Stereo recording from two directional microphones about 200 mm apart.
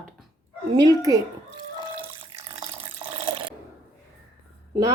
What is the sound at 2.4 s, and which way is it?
Water tap, 30° right (ahead or behind).